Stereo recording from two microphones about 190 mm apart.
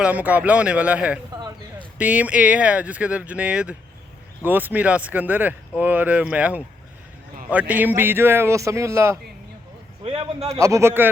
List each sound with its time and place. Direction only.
0.0 s speech: 10° right (ahead or behind)
1.3 s a sound: 20° right (ahead or behind)
2.0 s speech: 5° right (ahead or behind)
10.0 s a man's voice: 30° right (ahead or behind)
10.6 s speech: 15° right (ahead or behind)